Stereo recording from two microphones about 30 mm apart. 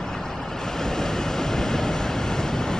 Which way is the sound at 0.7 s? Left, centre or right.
Centre.